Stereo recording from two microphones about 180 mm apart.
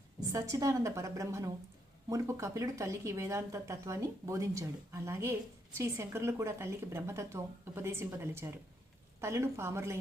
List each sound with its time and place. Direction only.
0.3 s speech: 15° right (ahead or behind)